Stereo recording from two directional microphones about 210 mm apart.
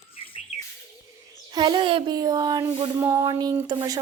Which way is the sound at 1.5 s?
20° right (ahead or behind).